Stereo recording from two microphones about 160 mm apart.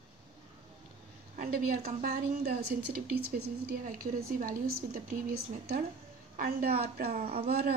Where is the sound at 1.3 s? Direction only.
60° right (ahead or behind).